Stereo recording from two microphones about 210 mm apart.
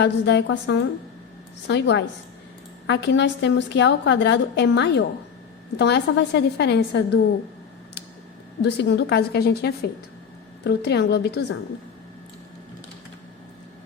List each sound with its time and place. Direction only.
0.0 s a woman's voice: 55° left (ahead or behind)
8.6 s a woman's voice: 55° left (ahead or behind)